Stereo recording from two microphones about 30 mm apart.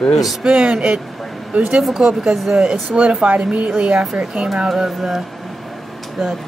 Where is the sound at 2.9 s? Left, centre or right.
Centre.